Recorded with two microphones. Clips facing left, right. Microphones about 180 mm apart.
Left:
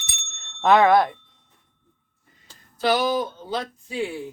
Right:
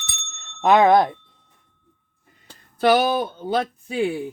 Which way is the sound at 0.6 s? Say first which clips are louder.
Right 1 dB; 15° right (ahead or behind).